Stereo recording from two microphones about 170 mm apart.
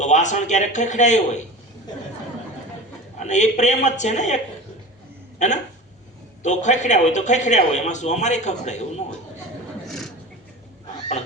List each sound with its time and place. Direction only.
0.0 s a man's voice: 45° left (ahead or behind)
3.2 s a man's voice: 45° left (ahead or behind)
5.4 s a man's voice: 45° left (ahead or behind)